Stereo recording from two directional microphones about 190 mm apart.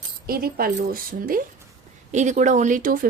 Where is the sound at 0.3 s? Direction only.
55° right (ahead or behind).